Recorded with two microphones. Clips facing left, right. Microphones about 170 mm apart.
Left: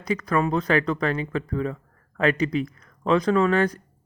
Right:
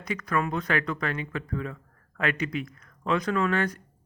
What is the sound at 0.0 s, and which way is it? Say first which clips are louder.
Speech: left 5 dB; 35° left (ahead or behind).